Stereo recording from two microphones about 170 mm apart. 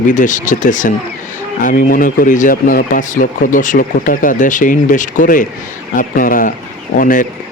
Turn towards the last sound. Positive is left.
turn(degrees=55)  # may be behind; listen again after turning